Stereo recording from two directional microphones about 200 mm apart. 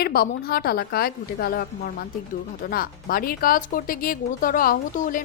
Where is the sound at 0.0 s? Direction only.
50° left (ahead or behind).